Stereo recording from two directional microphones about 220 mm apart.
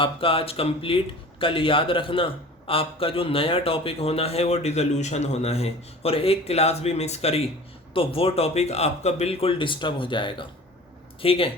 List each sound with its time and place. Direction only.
0.0 s speech: 25° left (ahead or behind)